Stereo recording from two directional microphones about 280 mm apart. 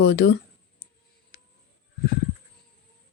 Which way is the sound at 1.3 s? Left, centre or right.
Left.